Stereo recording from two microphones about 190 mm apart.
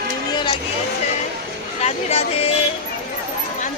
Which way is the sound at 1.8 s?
35° left (ahead or behind).